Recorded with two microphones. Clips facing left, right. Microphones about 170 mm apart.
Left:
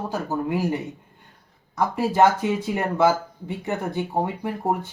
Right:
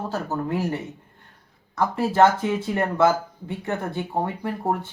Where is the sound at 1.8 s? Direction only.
15° left (ahead or behind).